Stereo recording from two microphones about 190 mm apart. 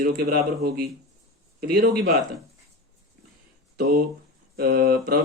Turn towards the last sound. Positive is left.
turn(degrees=-55)  # may be behind; listen again after turning